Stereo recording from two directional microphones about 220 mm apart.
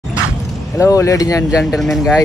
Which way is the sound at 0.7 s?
15° left (ahead or behind).